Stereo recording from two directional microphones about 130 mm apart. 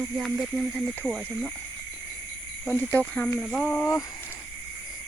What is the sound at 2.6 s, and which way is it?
Speech, 15° left (ahead or behind).